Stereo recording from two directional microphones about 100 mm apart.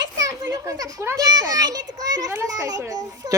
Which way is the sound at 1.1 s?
40° right (ahead or behind).